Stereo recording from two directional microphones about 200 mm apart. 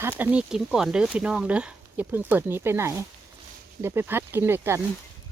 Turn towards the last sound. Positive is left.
turn(degrees=-10)  # may be behind; listen again after turning